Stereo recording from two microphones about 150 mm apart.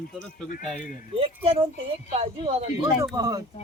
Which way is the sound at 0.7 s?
60° left (ahead or behind).